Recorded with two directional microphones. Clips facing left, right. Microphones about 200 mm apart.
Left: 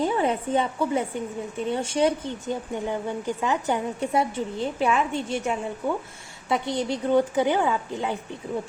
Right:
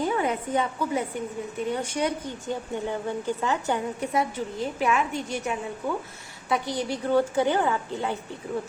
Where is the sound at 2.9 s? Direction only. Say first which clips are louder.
Even; 15° left (ahead or behind).